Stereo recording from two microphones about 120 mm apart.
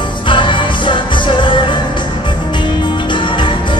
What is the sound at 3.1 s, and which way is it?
Music, 45° left (ahead or behind).